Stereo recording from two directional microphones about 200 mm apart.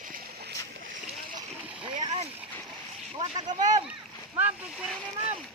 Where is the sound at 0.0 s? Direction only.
55° right (ahead or behind).